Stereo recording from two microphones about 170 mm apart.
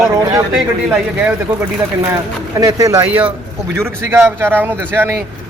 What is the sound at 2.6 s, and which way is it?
Speech, 20° right (ahead or behind).